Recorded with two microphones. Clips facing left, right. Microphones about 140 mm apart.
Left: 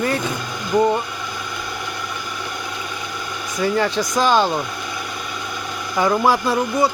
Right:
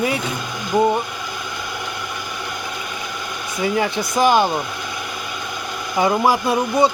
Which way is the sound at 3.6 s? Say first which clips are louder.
Left 1 dB; 15° right (ahead or behind).